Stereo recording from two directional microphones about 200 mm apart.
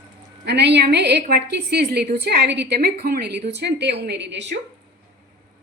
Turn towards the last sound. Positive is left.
turn(degrees=-60)  # may be behind; listen again after turning